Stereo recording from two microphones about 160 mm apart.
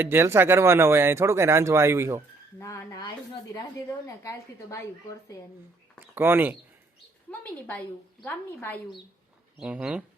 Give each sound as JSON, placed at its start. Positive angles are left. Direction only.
{"t": 0.0, "sound": "speech", "side_deg": -15}
{"t": 2.6, "sound": "a woman's voice", "side_deg": 20}
{"t": 6.0, "sound": "speech", "side_deg": -10}
{"t": 8.2, "sound": "a woman's voice", "side_deg": 10}
{"t": 9.6, "sound": "speech", "side_deg": -5}